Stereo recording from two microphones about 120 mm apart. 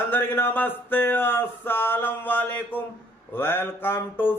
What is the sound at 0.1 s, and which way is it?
A man's voice, 15° left (ahead or behind).